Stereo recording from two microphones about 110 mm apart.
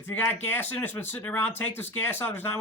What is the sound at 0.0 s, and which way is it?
Speech, 15° left (ahead or behind).